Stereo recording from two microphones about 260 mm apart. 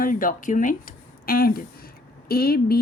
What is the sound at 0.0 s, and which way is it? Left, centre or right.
A woman's voice, left.